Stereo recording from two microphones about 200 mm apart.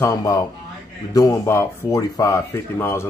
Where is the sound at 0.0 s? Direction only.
20° left (ahead or behind).